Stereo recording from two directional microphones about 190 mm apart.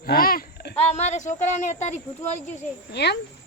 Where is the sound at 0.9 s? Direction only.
35° left (ahead or behind).